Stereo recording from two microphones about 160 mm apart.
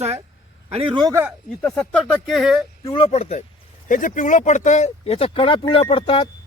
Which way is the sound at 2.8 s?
35° left (ahead or behind).